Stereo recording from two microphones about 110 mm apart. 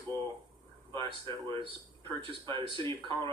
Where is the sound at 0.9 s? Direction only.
45° right (ahead or behind).